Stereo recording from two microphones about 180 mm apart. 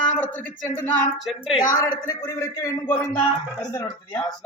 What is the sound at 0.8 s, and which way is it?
A man's voice, 10° left (ahead or behind).